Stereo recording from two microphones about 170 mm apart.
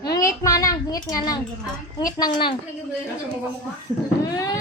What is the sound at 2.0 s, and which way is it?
Speech, 25° left (ahead or behind).